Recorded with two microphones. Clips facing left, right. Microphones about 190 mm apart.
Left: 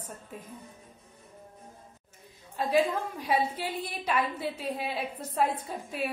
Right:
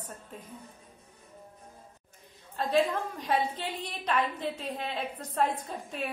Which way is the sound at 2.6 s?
5° left (ahead or behind).